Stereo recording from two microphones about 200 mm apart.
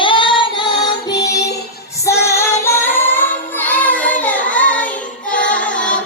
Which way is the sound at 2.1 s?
15° left (ahead or behind).